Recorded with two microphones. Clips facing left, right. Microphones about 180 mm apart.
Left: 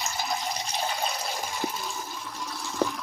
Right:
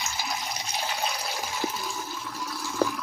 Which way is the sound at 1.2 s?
Centre (ahead or behind).